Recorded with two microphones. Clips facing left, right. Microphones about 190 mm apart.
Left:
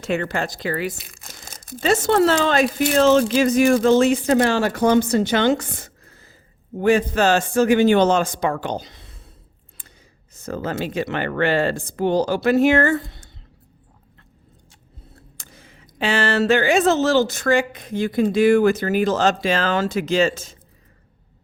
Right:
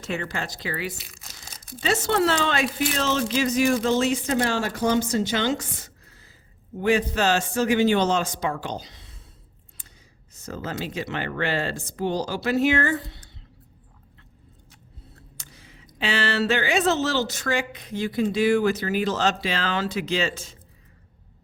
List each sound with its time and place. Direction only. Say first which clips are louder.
0.0 s speech: left 7 dB; 60° left (ahead or behind)
10.3 s speech: left 6 dB; 55° left (ahead or behind)
15.4 s speech: left 2 dB; 50° left (ahead or behind)